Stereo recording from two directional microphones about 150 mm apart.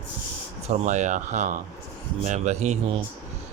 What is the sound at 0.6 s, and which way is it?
Speech, 55° right (ahead or behind).